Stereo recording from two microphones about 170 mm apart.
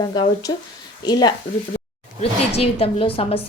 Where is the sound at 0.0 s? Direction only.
25° left (ahead or behind).